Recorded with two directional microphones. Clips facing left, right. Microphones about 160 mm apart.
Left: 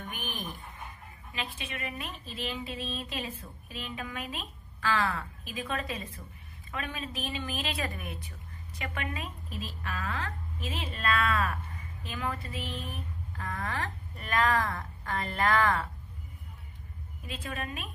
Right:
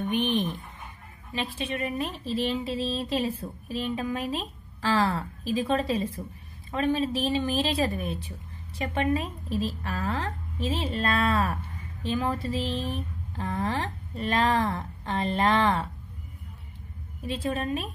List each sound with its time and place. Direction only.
0.1 s a woman's voice: 25° right (ahead or behind)
17.3 s a woman's voice: 30° right (ahead or behind)